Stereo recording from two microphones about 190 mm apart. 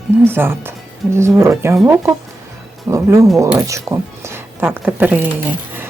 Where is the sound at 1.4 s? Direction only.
15° right (ahead or behind).